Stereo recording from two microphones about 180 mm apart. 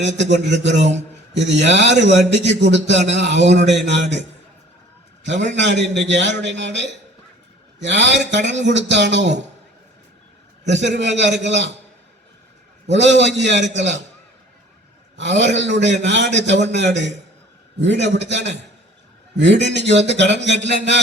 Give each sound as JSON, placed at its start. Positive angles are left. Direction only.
{"t": 0.4, "sound": "a man's voice", "side_deg": -80}
{"t": 5.5, "sound": "a man's voice", "side_deg": -80}
{"t": 10.6, "sound": "a man's voice", "side_deg": -75}
{"t": 12.9, "sound": "a man's voice", "side_deg": -80}
{"t": 15.1, "sound": "a man's voice", "side_deg": -80}